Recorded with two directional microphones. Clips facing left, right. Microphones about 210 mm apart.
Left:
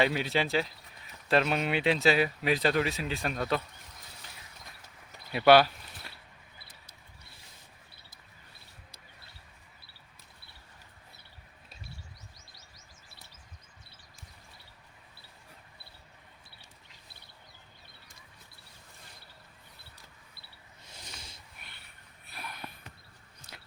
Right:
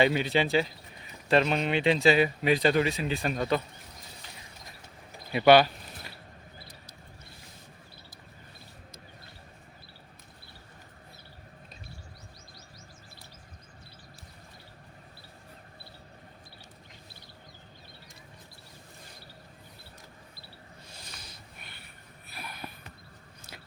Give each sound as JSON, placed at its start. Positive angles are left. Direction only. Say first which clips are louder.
{"t": 0.0, "sound": "speech", "louder": "right 3 dB", "side_deg": 0}
{"t": 5.3, "sound": "speech", "louder": "right 1 dB", "side_deg": 0}
{"t": 20.8, "sound": "a sound", "louder": "left 2 dB", "side_deg": 20}
{"t": 22.3, "sound": "sniff", "louder": "right 1 dB", "side_deg": -5}
{"t": 23.5, "sound": "biting", "louder": "right 3 dB", "side_deg": -5}